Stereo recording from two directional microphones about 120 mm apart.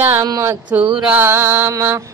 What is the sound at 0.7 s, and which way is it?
Mantra, 5° right (ahead or behind).